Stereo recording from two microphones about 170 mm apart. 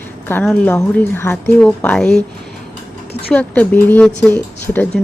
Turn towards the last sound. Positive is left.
turn(degrees=5)  # may be behind; listen again after turning